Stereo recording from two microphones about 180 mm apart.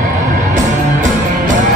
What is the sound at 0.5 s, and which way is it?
Music, 45° right (ahead or behind).